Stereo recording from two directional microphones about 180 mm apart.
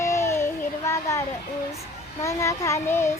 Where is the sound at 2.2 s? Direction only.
15° left (ahead or behind).